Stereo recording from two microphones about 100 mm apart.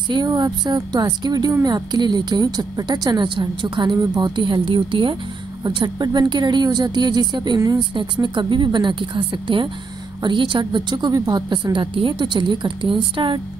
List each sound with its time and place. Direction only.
0.1 s a woman's voice: 45° right (ahead or behind)
5.6 s a woman's voice: 45° right (ahead or behind)
7.9 s a woman's voice: 50° right (ahead or behind)